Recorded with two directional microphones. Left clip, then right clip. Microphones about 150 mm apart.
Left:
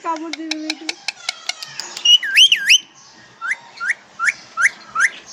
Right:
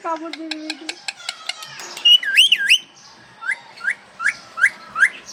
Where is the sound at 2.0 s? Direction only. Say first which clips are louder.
Left 1 dB; 25° left (ahead or behind).